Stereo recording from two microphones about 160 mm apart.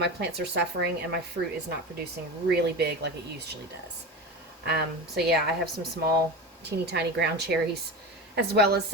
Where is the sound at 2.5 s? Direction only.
90° right.